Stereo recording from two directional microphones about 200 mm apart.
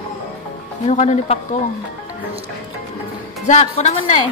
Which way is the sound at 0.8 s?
35° left (ahead or behind).